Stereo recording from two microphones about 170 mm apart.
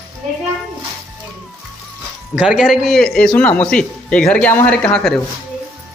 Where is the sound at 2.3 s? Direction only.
5° right (ahead or behind).